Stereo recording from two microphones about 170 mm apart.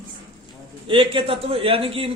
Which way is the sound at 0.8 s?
30° right (ahead or behind).